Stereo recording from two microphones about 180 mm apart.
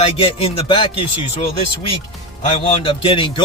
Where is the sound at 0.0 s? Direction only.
30° left (ahead or behind).